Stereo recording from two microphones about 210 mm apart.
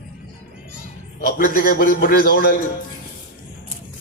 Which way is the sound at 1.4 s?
45° left (ahead or behind).